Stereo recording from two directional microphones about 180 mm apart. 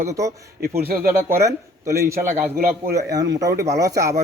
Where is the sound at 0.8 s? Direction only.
60° right (ahead or behind).